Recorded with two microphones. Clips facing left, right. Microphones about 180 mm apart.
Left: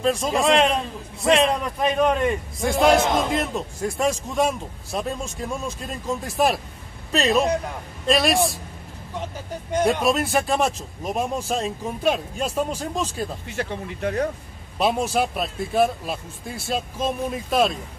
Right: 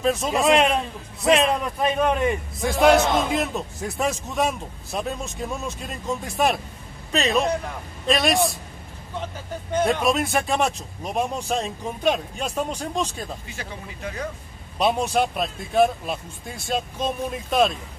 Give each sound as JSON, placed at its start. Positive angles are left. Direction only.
{"t": 0.0, "sound": "a man's voice", "side_deg": -5}
{"t": 10.0, "sound": "a man's voice", "side_deg": 0}
{"t": 13.6, "sound": "speech", "side_deg": 65}
{"t": 14.8, "sound": "a man's voice", "side_deg": 0}